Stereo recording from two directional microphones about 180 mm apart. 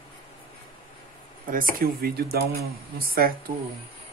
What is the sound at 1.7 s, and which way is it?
Speech, 60° right (ahead or behind).